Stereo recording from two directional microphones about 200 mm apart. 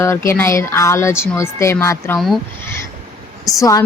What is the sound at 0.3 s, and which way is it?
A woman's voice, 15° left (ahead or behind).